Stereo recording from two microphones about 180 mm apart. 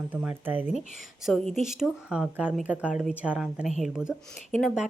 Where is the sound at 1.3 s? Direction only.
5° left (ahead or behind).